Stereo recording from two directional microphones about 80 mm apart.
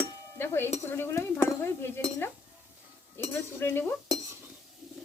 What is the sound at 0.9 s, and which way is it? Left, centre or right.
Speech, left.